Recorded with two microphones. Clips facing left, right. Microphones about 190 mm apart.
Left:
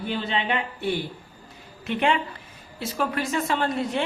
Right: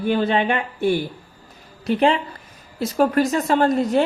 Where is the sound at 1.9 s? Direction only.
35° right (ahead or behind).